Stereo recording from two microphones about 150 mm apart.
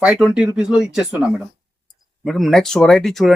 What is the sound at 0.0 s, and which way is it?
Speech, 5° right (ahead or behind).